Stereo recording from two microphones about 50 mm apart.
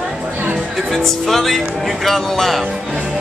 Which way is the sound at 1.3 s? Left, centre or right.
Centre.